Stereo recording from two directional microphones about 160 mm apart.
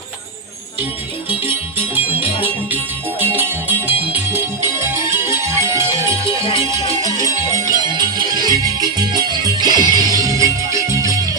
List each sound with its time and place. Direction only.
3.3 s music: 10° right (ahead or behind)
6.4 s music: 30° left (ahead or behind)
7.2 s music: 20° right (ahead or behind)